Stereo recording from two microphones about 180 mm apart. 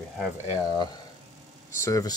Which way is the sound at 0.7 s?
25° left (ahead or behind).